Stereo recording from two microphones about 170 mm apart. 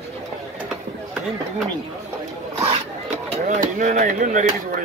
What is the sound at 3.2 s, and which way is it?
Speech, 45° right (ahead or behind).